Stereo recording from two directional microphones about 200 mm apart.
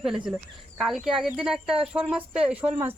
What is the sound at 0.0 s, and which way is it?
Speech, centre (ahead or behind).